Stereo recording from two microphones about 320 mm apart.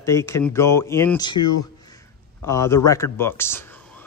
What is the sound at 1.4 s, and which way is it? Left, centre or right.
Speech, left.